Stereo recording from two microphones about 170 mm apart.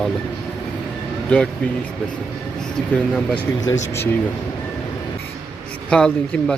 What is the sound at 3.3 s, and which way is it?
Speech, 20° left (ahead or behind).